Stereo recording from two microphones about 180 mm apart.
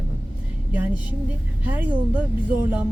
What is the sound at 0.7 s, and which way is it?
Speech, 10° right (ahead or behind).